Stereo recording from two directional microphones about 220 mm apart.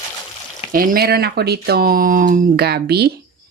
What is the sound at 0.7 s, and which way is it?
Speech, 40° right (ahead or behind).